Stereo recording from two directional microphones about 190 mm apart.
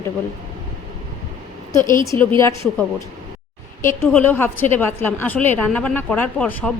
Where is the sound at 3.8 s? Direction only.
10° left (ahead or behind).